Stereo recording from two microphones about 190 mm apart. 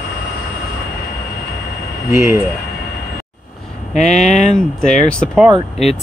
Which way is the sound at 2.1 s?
15° right (ahead or behind).